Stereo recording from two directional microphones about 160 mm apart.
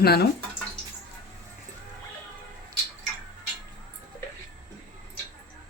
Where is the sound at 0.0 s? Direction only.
80° left.